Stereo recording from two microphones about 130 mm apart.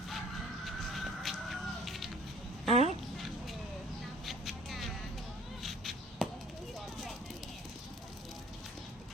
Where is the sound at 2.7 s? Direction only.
55° right (ahead or behind).